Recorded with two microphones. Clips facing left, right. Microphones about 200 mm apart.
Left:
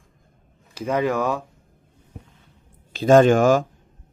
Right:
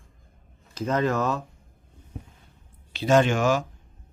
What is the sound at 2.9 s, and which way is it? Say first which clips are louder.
Speech: left 7 dB; 45° left (ahead or behind).